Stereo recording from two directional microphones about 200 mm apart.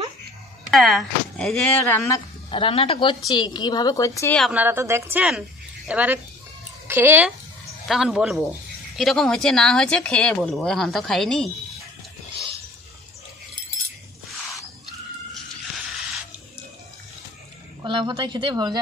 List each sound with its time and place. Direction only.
0.7 s speech: centre (ahead or behind)
2.5 s a woman's voice: 25° left (ahead or behind)
4.4 s a woman's voice: 5° right (ahead or behind)
17.8 s speech: 20° right (ahead or behind)